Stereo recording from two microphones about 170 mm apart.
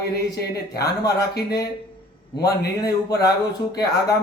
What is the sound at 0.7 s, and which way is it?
Speech, 20° left (ahead or behind).